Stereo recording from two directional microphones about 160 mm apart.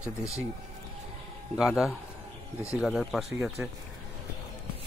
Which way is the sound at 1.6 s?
Centre (ahead or behind).